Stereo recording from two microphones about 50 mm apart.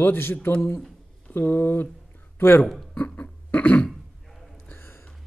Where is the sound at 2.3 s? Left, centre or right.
Left.